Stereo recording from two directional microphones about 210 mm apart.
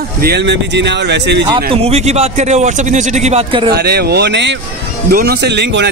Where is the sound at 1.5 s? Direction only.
30° right (ahead or behind).